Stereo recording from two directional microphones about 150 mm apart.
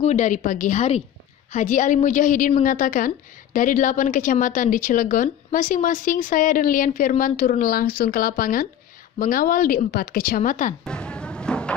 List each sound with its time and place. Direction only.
0.0 s a woman's voice: 55° left (ahead or behind)
10.8 s music: 5° left (ahead or behind)